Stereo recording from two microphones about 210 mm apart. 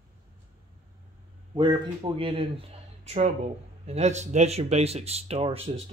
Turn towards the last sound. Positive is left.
turn(degrees=-30)  # may be behind; listen again after turning